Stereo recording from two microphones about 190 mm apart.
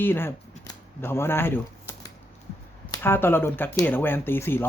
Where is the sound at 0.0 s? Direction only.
10° left (ahead or behind).